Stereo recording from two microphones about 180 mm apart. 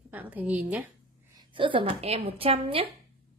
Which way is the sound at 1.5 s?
30° right (ahead or behind).